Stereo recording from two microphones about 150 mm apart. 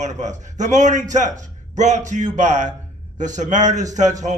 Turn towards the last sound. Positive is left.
turn(degrees=-55)  # may be behind; listen again after turning